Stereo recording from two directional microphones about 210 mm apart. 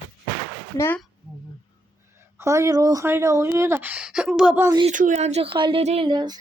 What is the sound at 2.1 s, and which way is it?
Speech, 15° right (ahead or behind).